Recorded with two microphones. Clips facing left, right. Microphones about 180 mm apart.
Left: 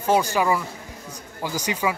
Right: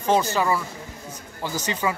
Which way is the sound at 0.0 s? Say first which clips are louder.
Left 1 dB; 10° left (ahead or behind).